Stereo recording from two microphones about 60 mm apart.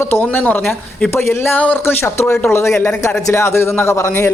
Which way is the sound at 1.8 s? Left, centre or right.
Left.